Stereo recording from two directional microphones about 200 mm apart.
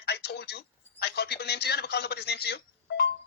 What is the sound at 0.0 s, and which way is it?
Speech, 55° left (ahead or behind).